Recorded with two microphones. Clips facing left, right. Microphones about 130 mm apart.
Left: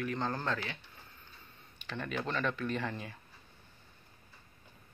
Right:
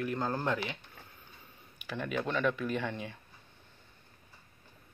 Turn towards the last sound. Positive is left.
turn(degrees=0)  # may be behind; listen again after turning